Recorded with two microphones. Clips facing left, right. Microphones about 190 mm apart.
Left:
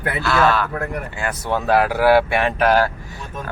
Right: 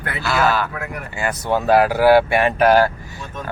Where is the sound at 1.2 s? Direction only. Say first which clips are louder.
Right 4 dB; centre (ahead or behind).